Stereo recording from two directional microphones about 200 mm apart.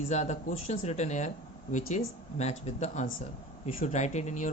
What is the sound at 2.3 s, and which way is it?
Speech, 35° left (ahead or behind).